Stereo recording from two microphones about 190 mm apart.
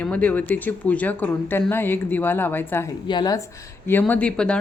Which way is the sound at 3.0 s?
25° left (ahead or behind).